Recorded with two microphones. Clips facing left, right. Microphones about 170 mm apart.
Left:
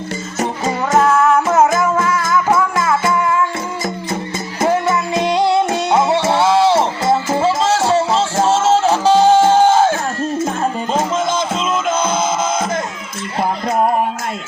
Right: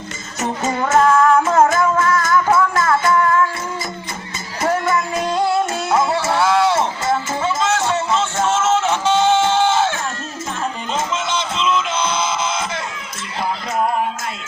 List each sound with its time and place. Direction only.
0.7 s music: 5° left (ahead or behind)
4.6 s music: 20° left (ahead or behind); by 13.8 s 50° left (ahead or behind)